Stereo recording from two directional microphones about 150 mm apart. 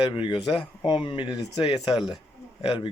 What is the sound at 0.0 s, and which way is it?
Speech, 35° left (ahead or behind).